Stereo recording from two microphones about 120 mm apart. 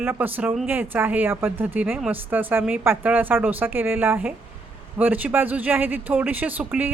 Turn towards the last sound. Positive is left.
turn(degrees=-10)  # may be behind; listen again after turning